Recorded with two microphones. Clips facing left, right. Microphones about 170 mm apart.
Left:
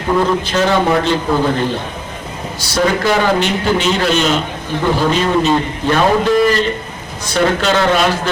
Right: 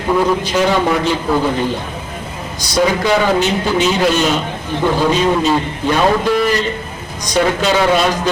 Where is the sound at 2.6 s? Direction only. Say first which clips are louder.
Right 1 dB; 15° right (ahead or behind).